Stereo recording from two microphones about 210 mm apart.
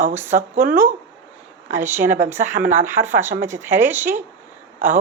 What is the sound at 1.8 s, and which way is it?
Speech, 10° right (ahead or behind).